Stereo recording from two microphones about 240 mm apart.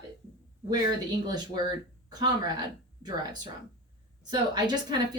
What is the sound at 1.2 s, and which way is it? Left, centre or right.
Speech, centre.